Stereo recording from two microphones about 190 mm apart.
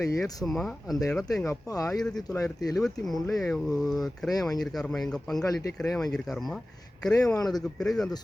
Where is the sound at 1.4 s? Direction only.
15° left (ahead or behind).